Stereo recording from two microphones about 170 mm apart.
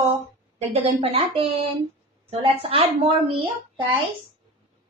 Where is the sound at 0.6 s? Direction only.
35° right (ahead or behind).